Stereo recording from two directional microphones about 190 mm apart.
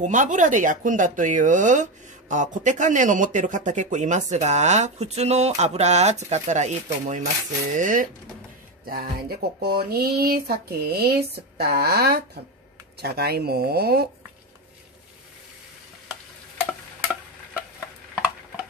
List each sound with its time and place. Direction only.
0.0 s speech: 40° right (ahead or behind)